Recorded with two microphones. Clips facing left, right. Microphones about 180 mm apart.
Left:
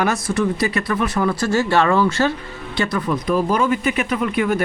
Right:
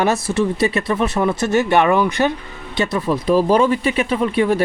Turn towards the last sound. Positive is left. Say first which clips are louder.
# right 3 dB
turn(degrees=-30)  # may be behind; listen again after turning